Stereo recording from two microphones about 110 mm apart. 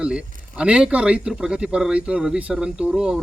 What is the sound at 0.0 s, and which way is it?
A man's voice, 10° right (ahead or behind).